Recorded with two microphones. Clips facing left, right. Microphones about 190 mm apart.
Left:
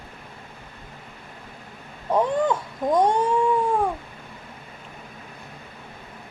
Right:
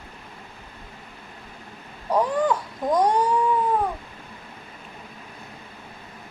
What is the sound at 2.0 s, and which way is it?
A woman's voice, 25° left (ahead or behind).